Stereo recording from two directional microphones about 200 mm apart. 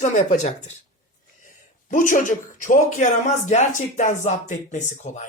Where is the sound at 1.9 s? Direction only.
40° left (ahead or behind).